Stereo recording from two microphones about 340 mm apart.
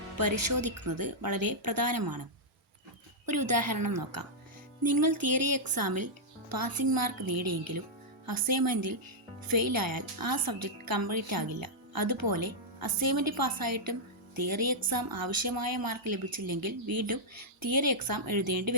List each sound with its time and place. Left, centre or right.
0.2 s speech: right
3.2 s a woman's voice: right